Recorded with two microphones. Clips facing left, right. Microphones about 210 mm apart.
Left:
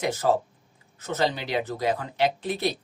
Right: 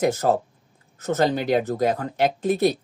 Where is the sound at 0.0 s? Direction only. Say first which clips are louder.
Right 4 dB; 45° right (ahead or behind).